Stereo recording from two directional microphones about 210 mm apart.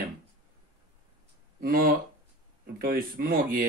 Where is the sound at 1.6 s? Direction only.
45° right (ahead or behind).